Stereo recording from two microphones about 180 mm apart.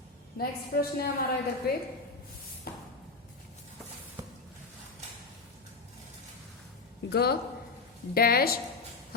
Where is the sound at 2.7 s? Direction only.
55° left (ahead or behind).